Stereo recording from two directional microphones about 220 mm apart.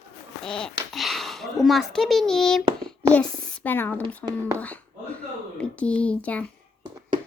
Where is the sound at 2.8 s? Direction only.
5° left (ahead or behind).